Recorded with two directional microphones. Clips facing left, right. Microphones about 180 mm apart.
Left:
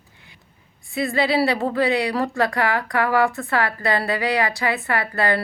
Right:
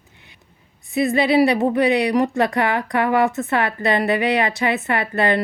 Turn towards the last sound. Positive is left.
turn(degrees=-20)  # may be behind; listen again after turning